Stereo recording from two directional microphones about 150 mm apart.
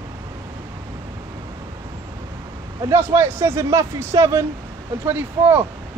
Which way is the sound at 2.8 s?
15° right (ahead or behind).